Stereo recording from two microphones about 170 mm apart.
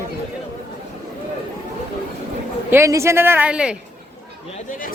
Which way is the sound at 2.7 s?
15° right (ahead or behind).